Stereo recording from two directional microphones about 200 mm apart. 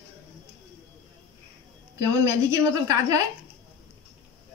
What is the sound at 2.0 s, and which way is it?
A woman's voice, 15° right (ahead or behind).